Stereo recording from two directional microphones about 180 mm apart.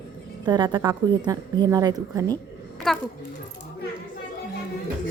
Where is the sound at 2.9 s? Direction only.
Centre (ahead or behind).